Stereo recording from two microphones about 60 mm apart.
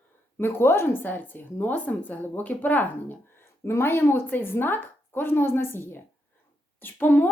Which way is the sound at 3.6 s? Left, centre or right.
Left.